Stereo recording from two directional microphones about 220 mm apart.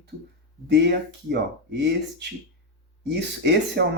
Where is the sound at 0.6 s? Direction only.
50° right (ahead or behind).